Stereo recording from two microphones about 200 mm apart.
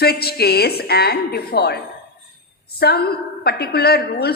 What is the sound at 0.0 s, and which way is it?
A woman's voice, 50° left (ahead or behind).